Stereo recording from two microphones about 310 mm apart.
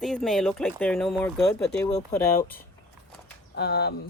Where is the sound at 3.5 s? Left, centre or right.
Left.